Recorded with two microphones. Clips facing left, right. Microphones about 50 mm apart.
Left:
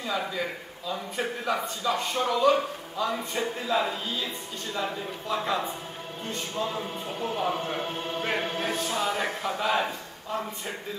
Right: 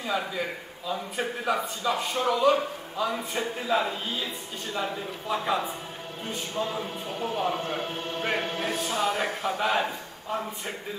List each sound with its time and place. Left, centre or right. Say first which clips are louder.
0.0 s speech: right 1 dB; centre
5.3 s a man's voice: right 1 dB; centre
9.1 s speech: right 1 dB; centre